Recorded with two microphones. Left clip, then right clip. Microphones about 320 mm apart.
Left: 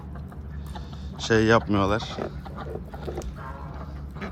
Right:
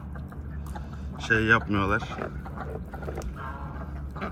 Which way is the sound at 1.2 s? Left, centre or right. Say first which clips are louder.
Left 2 dB; centre.